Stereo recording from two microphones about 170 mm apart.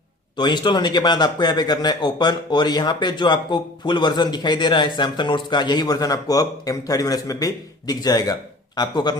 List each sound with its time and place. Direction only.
0.3 s a man's voice: 25° left (ahead or behind)